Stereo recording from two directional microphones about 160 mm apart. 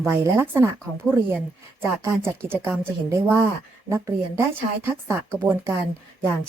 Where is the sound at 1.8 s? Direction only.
15° right (ahead or behind).